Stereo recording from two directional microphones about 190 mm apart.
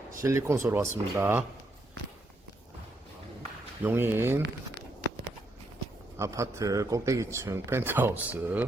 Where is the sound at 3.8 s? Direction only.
10° right (ahead or behind).